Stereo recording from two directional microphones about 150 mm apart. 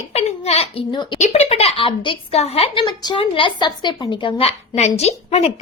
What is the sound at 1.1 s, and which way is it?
A woman's voice, 50° left (ahead or behind).